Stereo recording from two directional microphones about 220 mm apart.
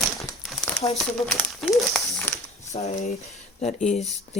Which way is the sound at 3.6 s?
30° left (ahead or behind).